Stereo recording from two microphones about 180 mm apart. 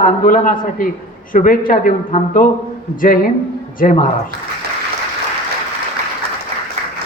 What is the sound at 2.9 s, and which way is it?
A woman's voice, 50° left (ahead or behind).